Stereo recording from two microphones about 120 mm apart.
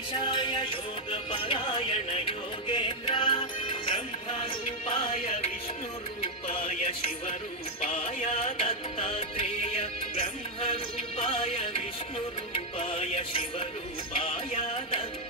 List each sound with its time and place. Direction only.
0.1 s music: 45° left (ahead or behind)